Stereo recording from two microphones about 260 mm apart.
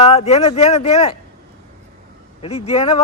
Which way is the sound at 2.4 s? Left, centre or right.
Left.